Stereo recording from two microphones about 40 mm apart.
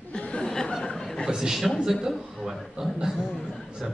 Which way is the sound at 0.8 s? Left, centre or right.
Centre.